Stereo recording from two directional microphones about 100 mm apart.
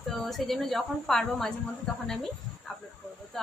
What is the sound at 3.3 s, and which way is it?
Speech, 5° left (ahead or behind).